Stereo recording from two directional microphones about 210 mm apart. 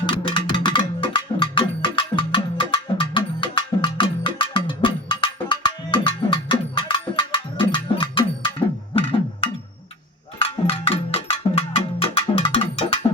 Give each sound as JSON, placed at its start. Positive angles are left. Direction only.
{"t": 0.0, "sound": "music", "side_deg": 25}